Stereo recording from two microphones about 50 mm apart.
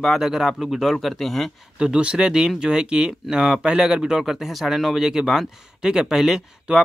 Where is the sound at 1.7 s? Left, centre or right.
Centre.